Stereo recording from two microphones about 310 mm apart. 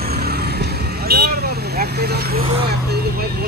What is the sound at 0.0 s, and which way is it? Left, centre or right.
Vehicle, right.